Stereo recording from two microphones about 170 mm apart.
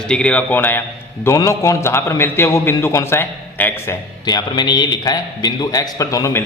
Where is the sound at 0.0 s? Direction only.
5° left (ahead or behind).